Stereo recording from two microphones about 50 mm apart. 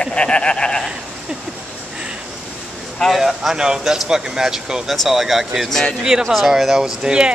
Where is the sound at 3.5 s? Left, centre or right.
Centre.